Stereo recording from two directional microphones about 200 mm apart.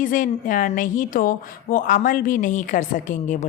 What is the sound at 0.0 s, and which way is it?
Speech, 40° left (ahead or behind).